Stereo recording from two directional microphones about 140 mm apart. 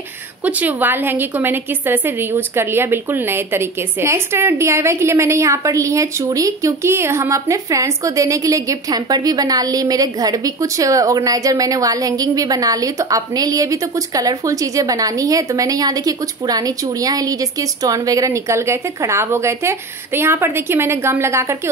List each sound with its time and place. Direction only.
0.5 s a woman's voice: 10° right (ahead or behind)